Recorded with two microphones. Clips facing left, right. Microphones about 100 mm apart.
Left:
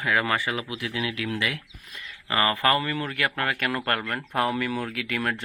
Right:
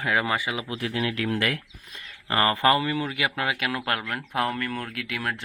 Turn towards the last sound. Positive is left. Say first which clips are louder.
# left 2 dB
turn(degrees=0)  # may be behind; listen again after turning